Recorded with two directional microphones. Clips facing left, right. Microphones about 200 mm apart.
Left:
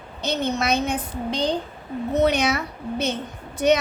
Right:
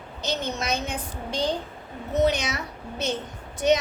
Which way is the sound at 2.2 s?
60° left (ahead or behind).